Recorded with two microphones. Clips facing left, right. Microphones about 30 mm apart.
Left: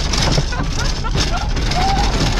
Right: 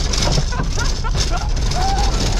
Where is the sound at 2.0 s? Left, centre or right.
Left.